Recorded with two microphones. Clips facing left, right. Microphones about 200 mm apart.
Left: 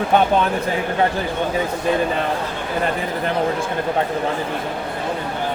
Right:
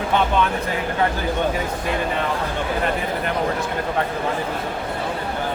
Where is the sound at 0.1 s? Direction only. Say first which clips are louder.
Left 4 dB; 45° left (ahead or behind).